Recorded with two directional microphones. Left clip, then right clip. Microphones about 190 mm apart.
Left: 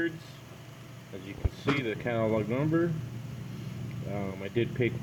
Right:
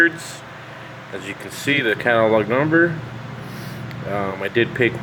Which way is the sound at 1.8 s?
10° right (ahead or behind).